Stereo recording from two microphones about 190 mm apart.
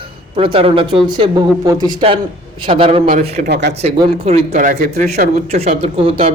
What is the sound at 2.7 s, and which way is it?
Speech, 30° right (ahead or behind).